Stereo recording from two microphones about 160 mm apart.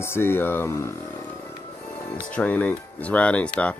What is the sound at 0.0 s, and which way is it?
Speech, 15° left (ahead or behind).